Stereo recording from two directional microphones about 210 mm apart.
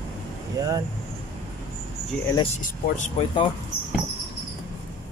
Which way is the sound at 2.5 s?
30° left (ahead or behind).